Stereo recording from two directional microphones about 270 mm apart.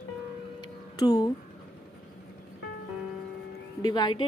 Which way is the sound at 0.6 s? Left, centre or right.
Centre.